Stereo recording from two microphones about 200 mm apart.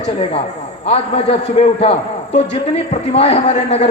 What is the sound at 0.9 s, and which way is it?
A man's voice, 30° left (ahead or behind).